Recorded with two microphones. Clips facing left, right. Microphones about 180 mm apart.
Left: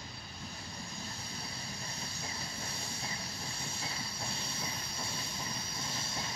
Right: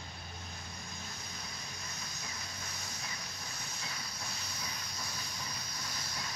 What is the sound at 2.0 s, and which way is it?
Vehicle, 30° left (ahead or behind).